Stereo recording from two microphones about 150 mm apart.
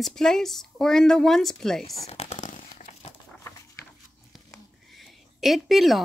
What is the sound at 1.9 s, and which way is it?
Crumpling, 45° left (ahead or behind).